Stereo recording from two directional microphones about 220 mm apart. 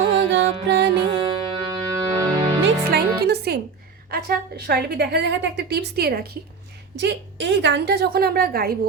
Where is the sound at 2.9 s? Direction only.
45° right (ahead or behind).